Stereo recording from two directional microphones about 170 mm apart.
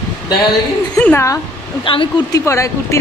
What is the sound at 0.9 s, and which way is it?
Speech, 10° left (ahead or behind).